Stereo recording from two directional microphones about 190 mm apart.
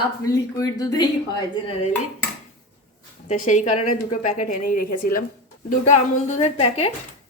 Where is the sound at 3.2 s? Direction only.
40° left (ahead or behind).